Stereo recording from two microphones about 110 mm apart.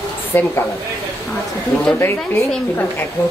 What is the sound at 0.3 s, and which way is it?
Speech, 20° left (ahead or behind).